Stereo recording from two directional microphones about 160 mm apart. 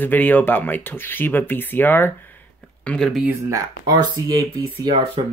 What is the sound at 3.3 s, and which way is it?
Speech, 20° right (ahead or behind).